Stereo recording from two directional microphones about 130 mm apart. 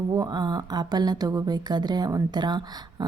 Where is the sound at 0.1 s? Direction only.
30° right (ahead or behind).